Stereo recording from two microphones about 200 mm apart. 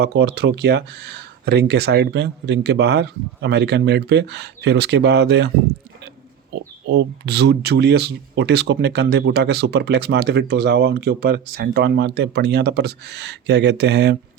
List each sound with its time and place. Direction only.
0.0 s speech: 55° right (ahead or behind)
6.5 s speech: 55° right (ahead or behind)